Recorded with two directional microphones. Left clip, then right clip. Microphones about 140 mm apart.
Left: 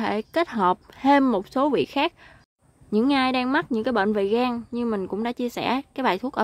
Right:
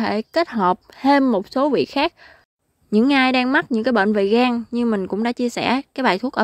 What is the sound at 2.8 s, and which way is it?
A woman's voice, 55° right (ahead or behind).